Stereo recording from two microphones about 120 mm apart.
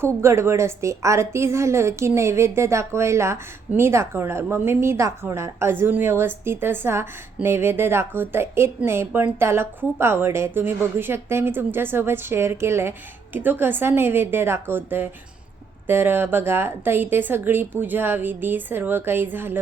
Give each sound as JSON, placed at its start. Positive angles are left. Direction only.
{"t": 0.0, "sound": "a woman's voice", "side_deg": -20}